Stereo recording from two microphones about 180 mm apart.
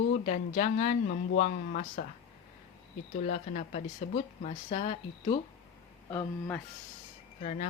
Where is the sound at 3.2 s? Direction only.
45° left (ahead or behind).